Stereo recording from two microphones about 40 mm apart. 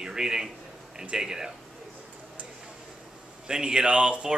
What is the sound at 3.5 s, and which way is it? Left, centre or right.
Speech, centre.